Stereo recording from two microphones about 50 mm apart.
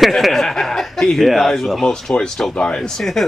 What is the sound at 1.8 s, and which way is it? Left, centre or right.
Speech, centre.